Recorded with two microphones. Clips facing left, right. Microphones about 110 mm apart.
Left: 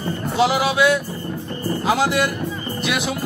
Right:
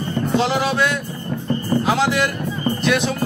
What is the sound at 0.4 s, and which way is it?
Speech, 10° left (ahead or behind).